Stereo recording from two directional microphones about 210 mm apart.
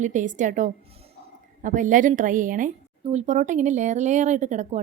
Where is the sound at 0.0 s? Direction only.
35° right (ahead or behind).